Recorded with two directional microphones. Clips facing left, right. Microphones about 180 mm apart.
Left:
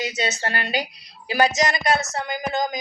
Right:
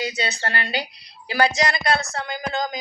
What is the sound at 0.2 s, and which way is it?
Speech, 15° left (ahead or behind).